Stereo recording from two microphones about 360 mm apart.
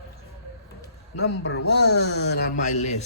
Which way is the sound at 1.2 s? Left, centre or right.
Left.